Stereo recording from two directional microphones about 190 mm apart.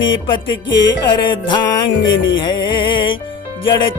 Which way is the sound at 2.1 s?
85° left.